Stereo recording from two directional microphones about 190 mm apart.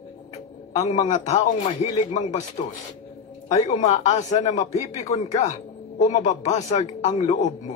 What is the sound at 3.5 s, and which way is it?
A man's voice, 35° left (ahead or behind).